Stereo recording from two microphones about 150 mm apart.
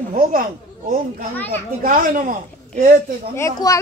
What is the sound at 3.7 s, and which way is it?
Speech, 25° left (ahead or behind).